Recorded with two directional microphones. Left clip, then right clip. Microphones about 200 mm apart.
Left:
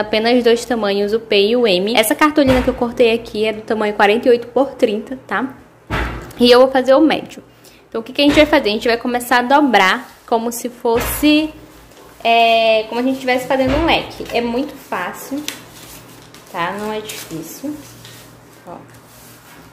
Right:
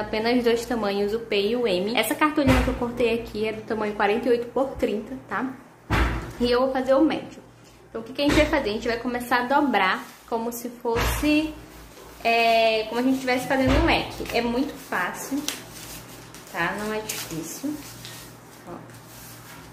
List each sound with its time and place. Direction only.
0.1 s a woman's voice: 30° left (ahead or behind)
6.4 s a woman's voice: 35° left (ahead or behind)
14.9 s a sound: 35° left (ahead or behind)
16.5 s a woman's voice: 40° left (ahead or behind)